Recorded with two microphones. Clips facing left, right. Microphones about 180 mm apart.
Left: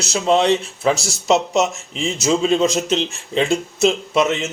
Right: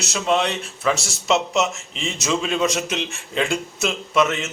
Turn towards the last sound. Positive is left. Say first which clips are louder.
# left 2 dB
turn(degrees=30)  # may be behind; listen again after turning